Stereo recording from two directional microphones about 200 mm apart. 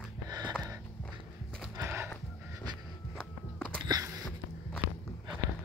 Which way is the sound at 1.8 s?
10° right (ahead or behind).